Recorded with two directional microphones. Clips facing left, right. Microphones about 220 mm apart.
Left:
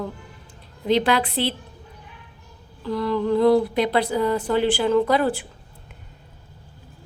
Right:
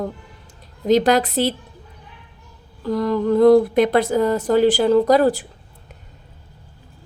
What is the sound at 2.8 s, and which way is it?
A woman's voice, 45° right (ahead or behind).